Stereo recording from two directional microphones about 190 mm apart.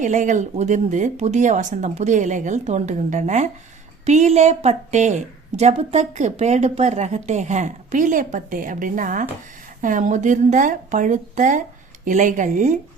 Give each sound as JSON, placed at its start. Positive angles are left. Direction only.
{"t": 0.0, "sound": "a woman's voice", "side_deg": -40}